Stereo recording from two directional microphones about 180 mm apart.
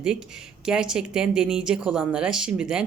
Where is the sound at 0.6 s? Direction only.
5° right (ahead or behind).